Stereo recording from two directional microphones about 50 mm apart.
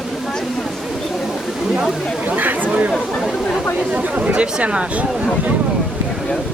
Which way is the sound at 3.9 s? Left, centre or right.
Right.